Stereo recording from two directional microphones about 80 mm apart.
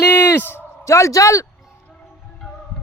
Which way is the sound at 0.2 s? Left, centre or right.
Left.